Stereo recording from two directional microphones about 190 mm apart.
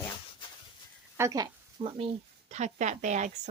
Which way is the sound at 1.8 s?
30° right (ahead or behind).